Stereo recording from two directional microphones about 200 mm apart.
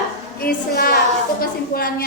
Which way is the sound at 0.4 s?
50° left (ahead or behind).